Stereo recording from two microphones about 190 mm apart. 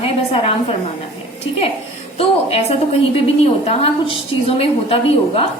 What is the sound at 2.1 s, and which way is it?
A woman's voice, 30° left (ahead or behind).